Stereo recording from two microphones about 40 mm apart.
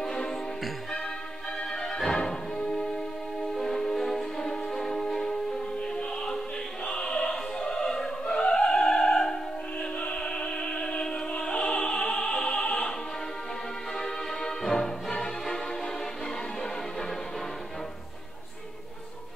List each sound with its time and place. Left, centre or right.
0.0 s music: centre
1.7 s music: centre
6.9 s opera: centre
9.8 s opera: left
13.9 s music: centre